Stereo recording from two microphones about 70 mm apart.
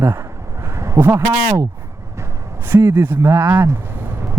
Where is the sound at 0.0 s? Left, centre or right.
Right.